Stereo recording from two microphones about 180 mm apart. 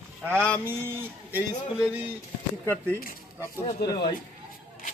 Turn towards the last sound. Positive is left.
turn(degrees=65)  # may be behind; listen again after turning